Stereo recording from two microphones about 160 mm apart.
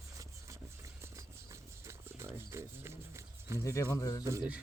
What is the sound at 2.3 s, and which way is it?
Speech, 15° right (ahead or behind).